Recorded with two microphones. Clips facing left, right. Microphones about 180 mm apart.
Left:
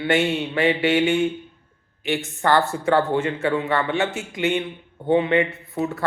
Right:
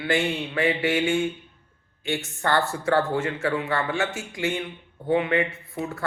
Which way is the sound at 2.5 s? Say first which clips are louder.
Left 3 dB; 20° left (ahead or behind).